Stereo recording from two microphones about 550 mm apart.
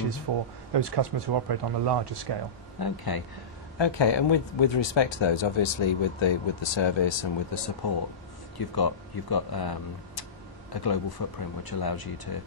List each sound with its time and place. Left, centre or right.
0.3 s speech: right
2.8 s speech: left